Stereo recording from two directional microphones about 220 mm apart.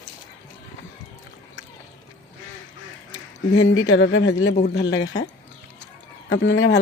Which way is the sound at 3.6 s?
70° left (ahead or behind).